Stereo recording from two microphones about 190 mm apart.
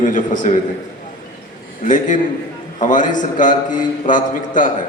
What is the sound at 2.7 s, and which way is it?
A man's voice, 40° left (ahead or behind).